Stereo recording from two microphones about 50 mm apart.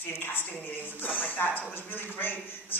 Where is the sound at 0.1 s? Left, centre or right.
Left.